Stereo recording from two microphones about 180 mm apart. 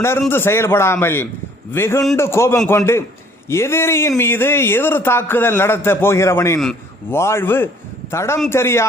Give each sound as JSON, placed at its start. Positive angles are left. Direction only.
{"t": 0.3, "sound": "a man's voice", "side_deg": 15}